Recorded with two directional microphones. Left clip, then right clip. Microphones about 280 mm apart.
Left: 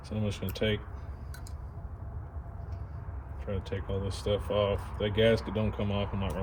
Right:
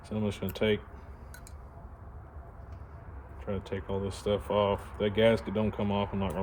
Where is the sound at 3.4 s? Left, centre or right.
Right.